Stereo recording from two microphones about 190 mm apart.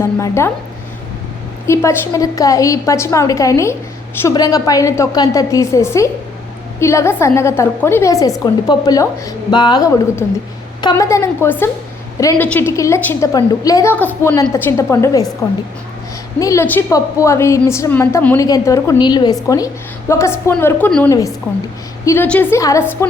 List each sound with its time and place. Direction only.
0.0 s a woman's voice: 15° left (ahead or behind)
1.6 s a woman's voice: 15° left (ahead or behind)
16.4 s a woman's voice: 15° left (ahead or behind)